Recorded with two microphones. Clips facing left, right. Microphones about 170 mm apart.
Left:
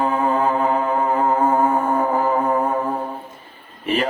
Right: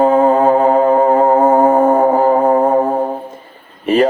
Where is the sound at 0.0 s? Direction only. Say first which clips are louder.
Right 9 dB; 45° right (ahead or behind).